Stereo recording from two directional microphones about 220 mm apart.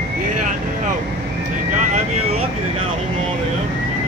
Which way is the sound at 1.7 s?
30° right (ahead or behind).